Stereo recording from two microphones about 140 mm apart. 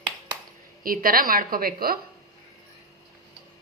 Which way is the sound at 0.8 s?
90° right.